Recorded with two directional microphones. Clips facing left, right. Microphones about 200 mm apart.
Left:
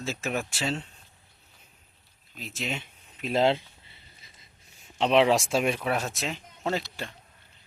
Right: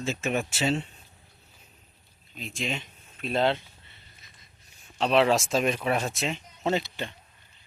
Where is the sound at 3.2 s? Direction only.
20° left (ahead or behind).